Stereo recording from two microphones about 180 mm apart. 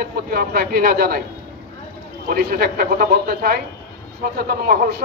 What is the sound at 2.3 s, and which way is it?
A man's voice, 60° right (ahead or behind).